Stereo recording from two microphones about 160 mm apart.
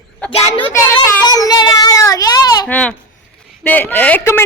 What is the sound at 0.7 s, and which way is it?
Child singing, 20° left (ahead or behind).